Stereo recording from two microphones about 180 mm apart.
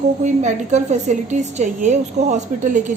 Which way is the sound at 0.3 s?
40° right (ahead or behind).